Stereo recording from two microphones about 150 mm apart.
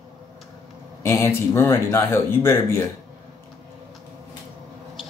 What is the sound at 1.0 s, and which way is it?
Speech, 15° left (ahead or behind).